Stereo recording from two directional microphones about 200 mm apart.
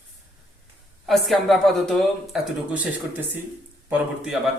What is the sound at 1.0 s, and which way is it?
Speech, centre (ahead or behind).